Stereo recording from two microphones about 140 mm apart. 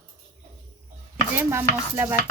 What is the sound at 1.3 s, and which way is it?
Stir, 15° right (ahead or behind).